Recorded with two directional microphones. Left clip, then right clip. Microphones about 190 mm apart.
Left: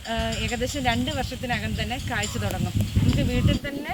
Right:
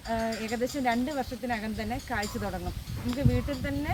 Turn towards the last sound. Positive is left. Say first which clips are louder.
# left 4 dB
turn(degrees=0)  # may be behind; listen again after turning